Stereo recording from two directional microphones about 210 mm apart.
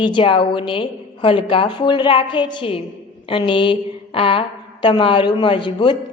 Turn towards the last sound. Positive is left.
turn(degrees=20)  # may be behind; listen again after turning